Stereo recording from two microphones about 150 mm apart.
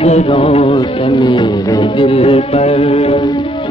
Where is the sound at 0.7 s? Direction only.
30° left (ahead or behind).